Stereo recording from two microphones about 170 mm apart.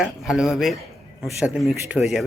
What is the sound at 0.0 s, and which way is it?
Speech, 5° right (ahead or behind).